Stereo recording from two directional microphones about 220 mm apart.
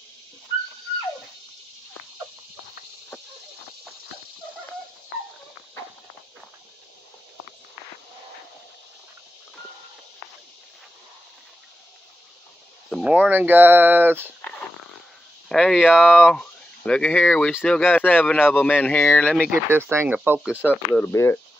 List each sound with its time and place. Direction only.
12.9 s speech: 5° right (ahead or behind)
15.4 s speech: centre (ahead or behind)
19.5 s speech: 10° right (ahead or behind)
20.6 s speech: 10° left (ahead or behind)